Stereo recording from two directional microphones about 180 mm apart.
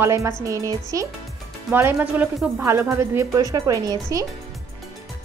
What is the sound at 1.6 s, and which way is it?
A woman's voice, 5° right (ahead or behind).